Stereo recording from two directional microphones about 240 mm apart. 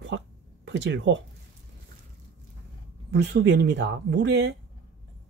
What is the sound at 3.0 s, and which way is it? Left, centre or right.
Speech, right.